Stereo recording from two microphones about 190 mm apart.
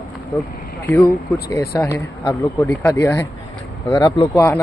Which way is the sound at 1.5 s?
10° left (ahead or behind).